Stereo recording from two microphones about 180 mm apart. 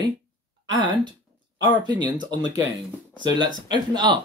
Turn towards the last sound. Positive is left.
turn(degrees=-25)  # may be behind; listen again after turning